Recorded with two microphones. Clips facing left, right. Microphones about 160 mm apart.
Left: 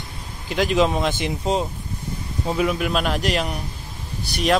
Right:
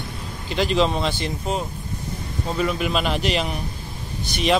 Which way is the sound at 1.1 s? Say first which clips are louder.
Left 3 dB; 25° left (ahead or behind).